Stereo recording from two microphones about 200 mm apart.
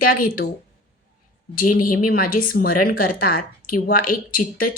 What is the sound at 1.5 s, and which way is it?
Speech, 45° left (ahead or behind).